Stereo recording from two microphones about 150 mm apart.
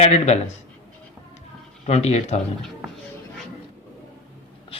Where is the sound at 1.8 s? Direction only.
50° left (ahead or behind).